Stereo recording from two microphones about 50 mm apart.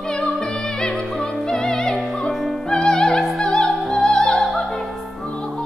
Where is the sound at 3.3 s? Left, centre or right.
Centre.